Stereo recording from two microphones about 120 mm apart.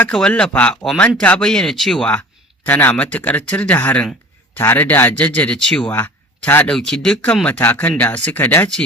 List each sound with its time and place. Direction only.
0.0 s speech: 10° left (ahead or behind)
5.9 s speech: 20° left (ahead or behind)